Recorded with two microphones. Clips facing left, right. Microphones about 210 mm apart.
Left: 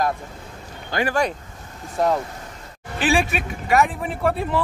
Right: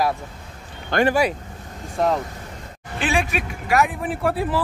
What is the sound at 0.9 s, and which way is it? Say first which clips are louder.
Speech: right 4 dB; 60° right (ahead or behind).